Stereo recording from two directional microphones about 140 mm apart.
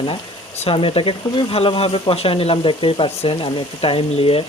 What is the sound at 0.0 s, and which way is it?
Speech, 45° left (ahead or behind).